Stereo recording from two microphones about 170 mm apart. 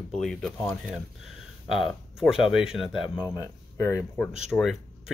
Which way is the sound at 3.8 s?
15° left (ahead or behind).